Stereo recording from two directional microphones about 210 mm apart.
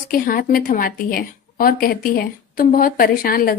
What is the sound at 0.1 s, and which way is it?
A woman's voice, 40° left (ahead or behind).